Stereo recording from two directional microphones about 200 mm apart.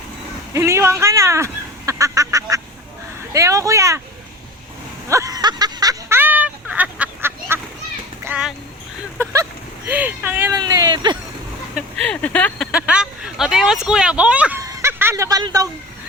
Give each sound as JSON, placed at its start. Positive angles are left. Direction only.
{"t": 0.5, "sound": "speech", "side_deg": -15}
{"t": 5.0, "sound": "a sound", "side_deg": -15}
{"t": 8.2, "sound": "a child's voice", "side_deg": -5}
{"t": 9.3, "sound": "vehicle", "side_deg": -10}
{"t": 10.6, "sound": "speech", "side_deg": -20}
{"t": 11.7, "sound": "speech", "side_deg": 5}
{"t": 14.6, "sound": "a sound", "side_deg": -15}